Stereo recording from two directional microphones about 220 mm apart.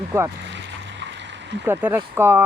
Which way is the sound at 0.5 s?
55° right (ahead or behind).